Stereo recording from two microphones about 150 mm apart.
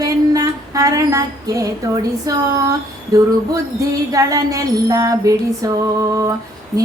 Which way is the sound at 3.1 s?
25° right (ahead or behind).